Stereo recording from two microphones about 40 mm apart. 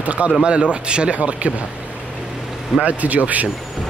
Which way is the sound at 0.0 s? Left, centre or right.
Right.